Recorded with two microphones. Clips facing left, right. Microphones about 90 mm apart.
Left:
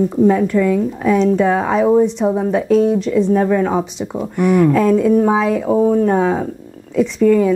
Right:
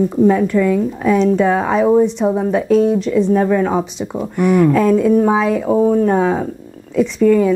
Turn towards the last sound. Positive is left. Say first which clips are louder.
# even
turn(degrees=-20)  # may be behind; listen again after turning